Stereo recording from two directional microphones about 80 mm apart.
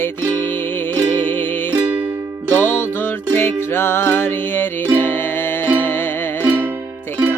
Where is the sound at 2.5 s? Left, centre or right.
Left.